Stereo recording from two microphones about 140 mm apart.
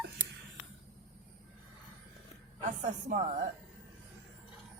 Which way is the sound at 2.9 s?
60° right (ahead or behind).